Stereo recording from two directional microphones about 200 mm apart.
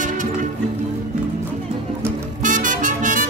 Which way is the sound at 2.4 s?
40° right (ahead or behind).